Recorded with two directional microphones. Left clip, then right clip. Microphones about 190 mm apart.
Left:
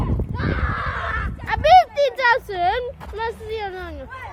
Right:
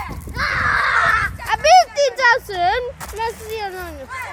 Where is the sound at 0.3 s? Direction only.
25° left (ahead or behind).